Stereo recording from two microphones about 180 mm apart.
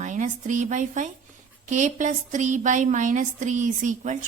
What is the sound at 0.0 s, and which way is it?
A woman's voice, 45° right (ahead or behind).